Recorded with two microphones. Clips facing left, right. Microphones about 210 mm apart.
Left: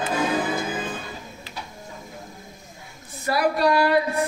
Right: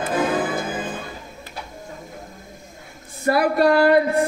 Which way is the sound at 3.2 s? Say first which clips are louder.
Right 4 dB; 55° right (ahead or behind).